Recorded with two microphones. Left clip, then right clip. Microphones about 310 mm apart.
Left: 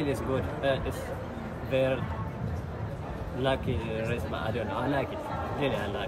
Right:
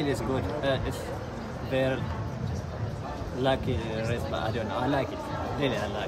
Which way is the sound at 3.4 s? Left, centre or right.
Centre.